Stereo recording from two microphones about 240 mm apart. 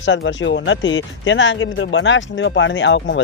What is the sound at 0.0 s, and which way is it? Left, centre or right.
Speech, left.